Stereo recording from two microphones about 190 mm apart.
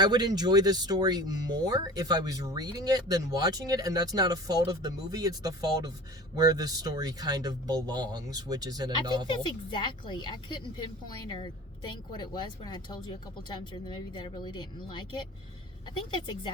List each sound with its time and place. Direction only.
0.0 s speech: 20° right (ahead or behind)
9.0 s a woman's voice: 25° left (ahead or behind)